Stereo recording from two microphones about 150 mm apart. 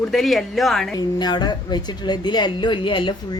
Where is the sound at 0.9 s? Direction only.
30° left (ahead or behind).